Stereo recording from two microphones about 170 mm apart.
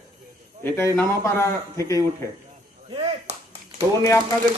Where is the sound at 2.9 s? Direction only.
40° right (ahead or behind).